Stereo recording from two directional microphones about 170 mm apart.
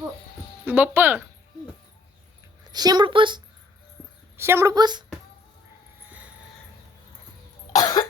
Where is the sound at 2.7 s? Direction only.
25° right (ahead or behind).